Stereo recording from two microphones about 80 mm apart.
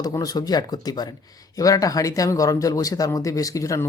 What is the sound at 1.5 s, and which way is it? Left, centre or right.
Speech, left.